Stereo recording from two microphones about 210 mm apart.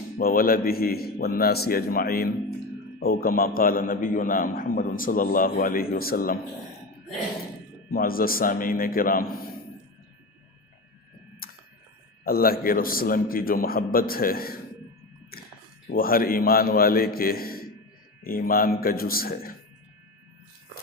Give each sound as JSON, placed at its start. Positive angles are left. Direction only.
{"t": 0.2, "sound": "a man's voice", "side_deg": 45}
{"t": 7.9, "sound": "a man's voice", "side_deg": 45}
{"t": 11.4, "sound": "a sound", "side_deg": 45}
{"t": 12.2, "sound": "a man's voice", "side_deg": 45}
{"t": 15.9, "sound": "a man's voice", "side_deg": 45}